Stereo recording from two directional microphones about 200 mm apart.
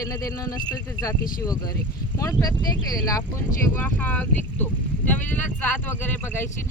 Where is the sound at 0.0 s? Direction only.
15° left (ahead or behind).